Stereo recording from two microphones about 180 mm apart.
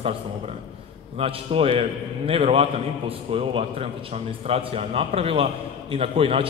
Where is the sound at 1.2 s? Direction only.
30° right (ahead or behind).